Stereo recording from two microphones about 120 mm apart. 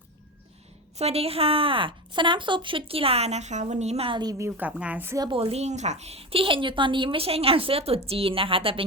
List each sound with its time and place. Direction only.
0.9 s a woman's voice: 60° right (ahead or behind)
4.2 s a woman's voice: 35° right (ahead or behind)
4.4 s a woman's voice: 15° right (ahead or behind)
5.3 s a woman's voice: 55° right (ahead or behind)